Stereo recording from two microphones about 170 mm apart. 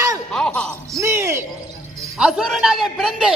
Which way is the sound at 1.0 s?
15° right (ahead or behind).